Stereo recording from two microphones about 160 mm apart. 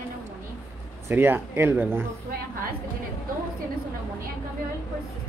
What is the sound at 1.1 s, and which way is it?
Speech, 15° right (ahead or behind).